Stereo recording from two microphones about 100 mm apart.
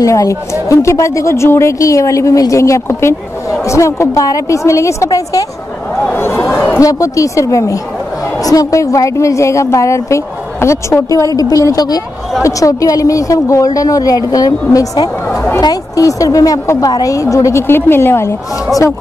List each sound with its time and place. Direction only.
0.0 s a woman's voice: 30° left (ahead or behind)
6.1 s a sound: 25° left (ahead or behind)
6.5 s chatter: 20° left (ahead or behind)
6.8 s a woman's voice: 35° left (ahead or behind)